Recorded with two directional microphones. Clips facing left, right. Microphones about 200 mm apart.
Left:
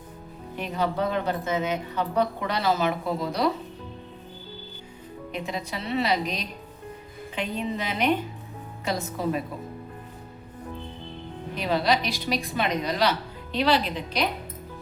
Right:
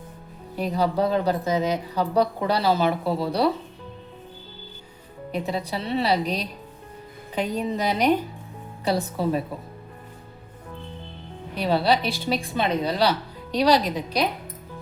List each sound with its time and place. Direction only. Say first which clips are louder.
0.5 s speech: right 4 dB; 35° right (ahead or behind)
5.3 s speech: right 5 dB; 35° right (ahead or behind)
11.5 s speech: right 3 dB; 35° right (ahead or behind)